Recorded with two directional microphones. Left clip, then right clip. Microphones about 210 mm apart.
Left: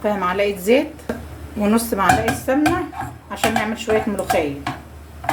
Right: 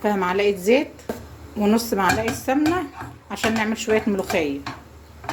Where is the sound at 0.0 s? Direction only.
30° right (ahead or behind).